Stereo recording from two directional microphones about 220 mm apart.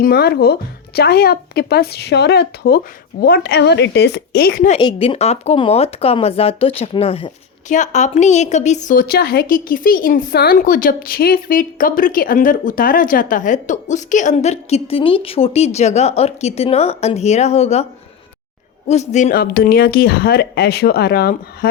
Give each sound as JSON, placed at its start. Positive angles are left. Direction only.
{"t": 0.0, "sound": "speech", "side_deg": 45}
{"t": 4.7, "sound": "a woman's voice", "side_deg": 25}
{"t": 18.9, "sound": "speech", "side_deg": 30}